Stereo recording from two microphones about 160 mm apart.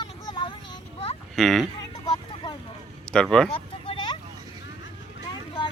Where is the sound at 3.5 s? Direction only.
35° left (ahead or behind).